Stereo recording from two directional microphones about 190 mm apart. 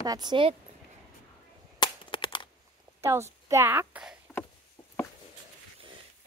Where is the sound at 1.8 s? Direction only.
25° left (ahead or behind).